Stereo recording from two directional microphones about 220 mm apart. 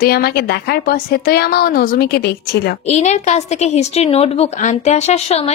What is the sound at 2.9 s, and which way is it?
A woman's voice, 30° left (ahead or behind).